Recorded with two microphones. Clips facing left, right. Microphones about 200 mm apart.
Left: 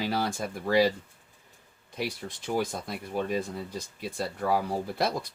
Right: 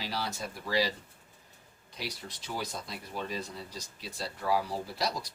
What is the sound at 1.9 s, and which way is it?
Speech, 55° left (ahead or behind).